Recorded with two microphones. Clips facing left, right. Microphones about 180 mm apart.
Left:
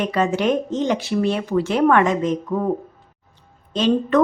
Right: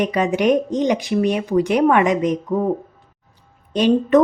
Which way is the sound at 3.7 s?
15° right (ahead or behind).